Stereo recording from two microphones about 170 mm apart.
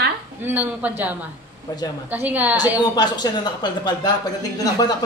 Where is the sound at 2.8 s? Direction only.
25° left (ahead or behind).